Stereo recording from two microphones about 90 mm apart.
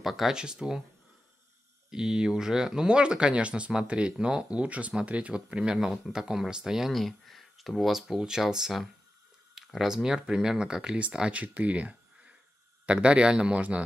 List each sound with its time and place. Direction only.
0.0 s speech: centre (ahead or behind)
1.9 s speech: 5° right (ahead or behind)